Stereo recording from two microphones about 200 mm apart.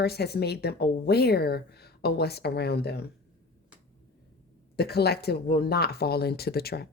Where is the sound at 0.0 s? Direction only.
55° left (ahead or behind).